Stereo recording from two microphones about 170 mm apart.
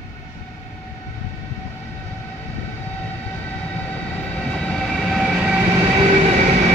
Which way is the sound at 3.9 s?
5° left (ahead or behind).